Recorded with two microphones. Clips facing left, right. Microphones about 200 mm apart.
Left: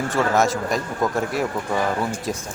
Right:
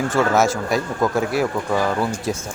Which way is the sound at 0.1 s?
Centre (ahead or behind).